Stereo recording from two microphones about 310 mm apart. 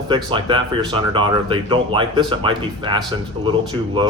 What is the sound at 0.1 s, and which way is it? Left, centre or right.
Speech, centre.